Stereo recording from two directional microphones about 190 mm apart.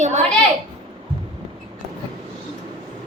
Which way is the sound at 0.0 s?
40° right (ahead or behind).